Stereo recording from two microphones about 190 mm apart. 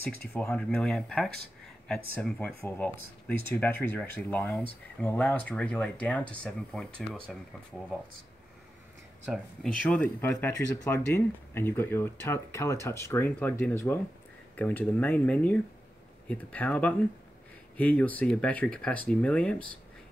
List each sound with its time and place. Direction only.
0.5 s speech: 5° left (ahead or behind)
9.3 s speech: 5° left (ahead or behind)